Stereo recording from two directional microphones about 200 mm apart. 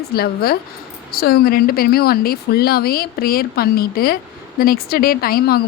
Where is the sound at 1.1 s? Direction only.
50° left (ahead or behind).